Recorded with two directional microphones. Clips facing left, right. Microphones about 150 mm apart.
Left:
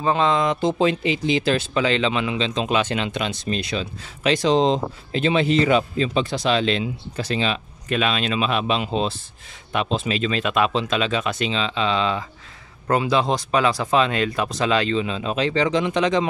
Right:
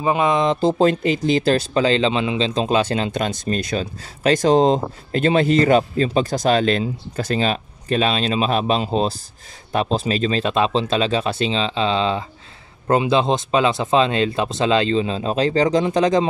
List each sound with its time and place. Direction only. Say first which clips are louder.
0.0 s speech: right 2 dB; 15° right (ahead or behind); by 16.3 s 35° right (ahead or behind)